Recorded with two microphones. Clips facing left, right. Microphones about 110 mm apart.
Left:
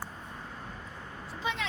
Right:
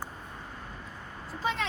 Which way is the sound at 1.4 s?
40° right (ahead or behind).